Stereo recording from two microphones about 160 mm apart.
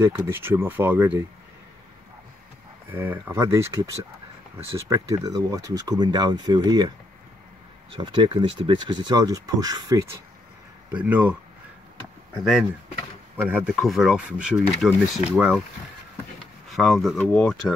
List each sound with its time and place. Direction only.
0.0 s speech: 15° right (ahead or behind)
2.9 s speech: 15° right (ahead or behind)
7.9 s speech: 30° right (ahead or behind)
10.9 s speech: 10° right (ahead or behind)
13.4 s speech: 10° right (ahead or behind)
16.7 s speech: centre (ahead or behind)